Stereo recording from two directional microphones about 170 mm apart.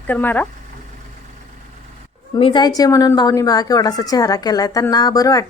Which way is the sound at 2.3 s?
25° left (ahead or behind).